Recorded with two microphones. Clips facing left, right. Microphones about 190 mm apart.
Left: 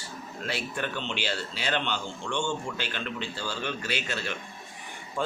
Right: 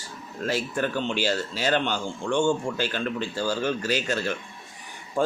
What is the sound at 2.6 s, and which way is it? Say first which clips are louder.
A man's voice: right 7 dB; 40° right (ahead or behind).